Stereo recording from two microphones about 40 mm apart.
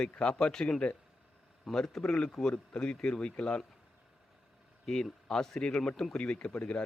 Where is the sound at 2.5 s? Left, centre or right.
Left.